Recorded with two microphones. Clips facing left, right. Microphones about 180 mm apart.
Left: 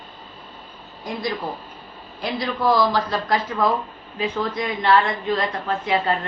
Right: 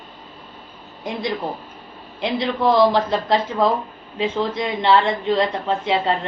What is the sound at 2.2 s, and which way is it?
A woman's voice, 25° right (ahead or behind).